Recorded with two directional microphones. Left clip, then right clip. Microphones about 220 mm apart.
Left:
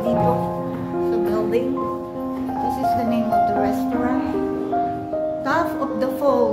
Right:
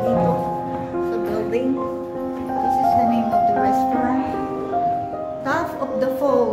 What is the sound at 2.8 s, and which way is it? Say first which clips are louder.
Music: right 3 dB; 15° left (ahead or behind).